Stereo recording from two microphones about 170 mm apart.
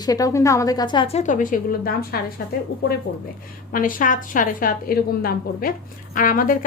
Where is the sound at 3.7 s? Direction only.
55° left (ahead or behind).